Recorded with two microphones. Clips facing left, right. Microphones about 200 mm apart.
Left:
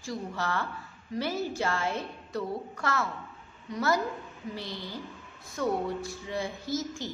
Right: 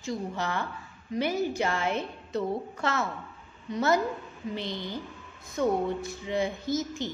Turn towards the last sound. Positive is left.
turn(degrees=-20)  # may be behind; listen again after turning